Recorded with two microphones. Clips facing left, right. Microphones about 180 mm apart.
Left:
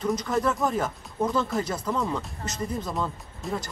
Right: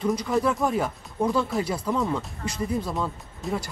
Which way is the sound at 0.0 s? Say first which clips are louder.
Right 2 dB; 5° right (ahead or behind).